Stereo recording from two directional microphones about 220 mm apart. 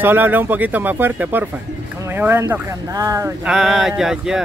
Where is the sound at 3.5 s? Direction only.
Centre (ahead or behind).